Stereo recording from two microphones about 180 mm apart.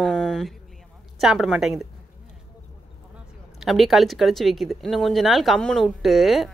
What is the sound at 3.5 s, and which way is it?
Speech, centre (ahead or behind).